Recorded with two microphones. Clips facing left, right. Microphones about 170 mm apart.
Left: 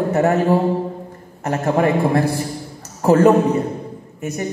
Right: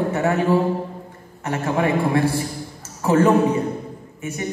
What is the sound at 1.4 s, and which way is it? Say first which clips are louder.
A man's voice: left 4 dB; 40° left (ahead or behind).